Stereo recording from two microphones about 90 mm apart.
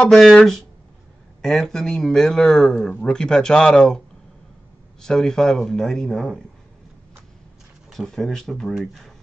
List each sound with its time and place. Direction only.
0.1 s speech: 5° left (ahead or behind)
5.0 s speech: 5° left (ahead or behind)
7.9 s speech: 5° left (ahead or behind)